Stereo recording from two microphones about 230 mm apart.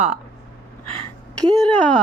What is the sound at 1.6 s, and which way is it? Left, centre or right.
Speech, centre.